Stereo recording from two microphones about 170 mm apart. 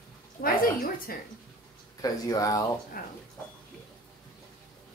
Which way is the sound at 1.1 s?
60° left (ahead or behind).